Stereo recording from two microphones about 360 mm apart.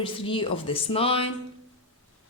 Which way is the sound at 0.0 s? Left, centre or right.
Centre.